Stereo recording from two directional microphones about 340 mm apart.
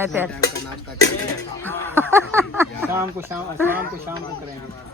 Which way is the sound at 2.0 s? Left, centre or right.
Centre.